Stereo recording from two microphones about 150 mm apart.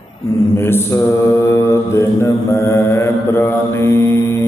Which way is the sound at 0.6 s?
15° left (ahead or behind).